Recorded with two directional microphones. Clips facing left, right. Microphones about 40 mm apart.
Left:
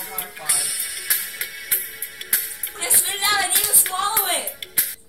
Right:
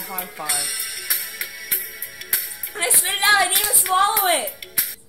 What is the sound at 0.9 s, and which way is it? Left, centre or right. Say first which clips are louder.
Music: left 1 dB; left.